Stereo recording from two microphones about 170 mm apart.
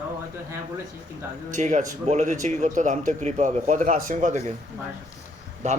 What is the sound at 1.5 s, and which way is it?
Speech, 45° right (ahead or behind).